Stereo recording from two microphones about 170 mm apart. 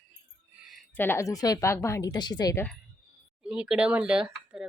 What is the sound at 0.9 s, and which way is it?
Speech, 10° left (ahead or behind).